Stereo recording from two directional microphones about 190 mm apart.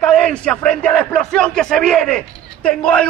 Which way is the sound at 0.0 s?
5° left (ahead or behind).